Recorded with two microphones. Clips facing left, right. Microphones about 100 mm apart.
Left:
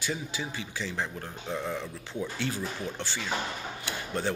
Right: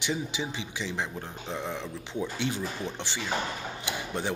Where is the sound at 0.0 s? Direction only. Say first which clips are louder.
Right 3 dB; 20° right (ahead or behind).